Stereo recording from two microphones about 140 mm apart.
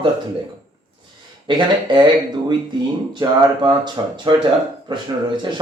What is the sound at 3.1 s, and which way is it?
Speech, 35° right (ahead or behind).